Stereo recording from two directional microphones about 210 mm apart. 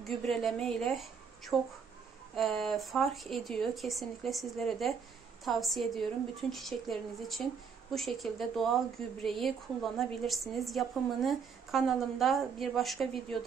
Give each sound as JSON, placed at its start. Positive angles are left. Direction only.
{"t": 0.0, "sound": "a woman's voice", "side_deg": 0}